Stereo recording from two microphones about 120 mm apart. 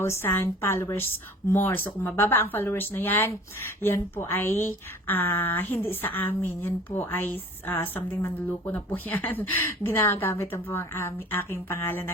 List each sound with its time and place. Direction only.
0.0 s a woman's voice: 20° left (ahead or behind)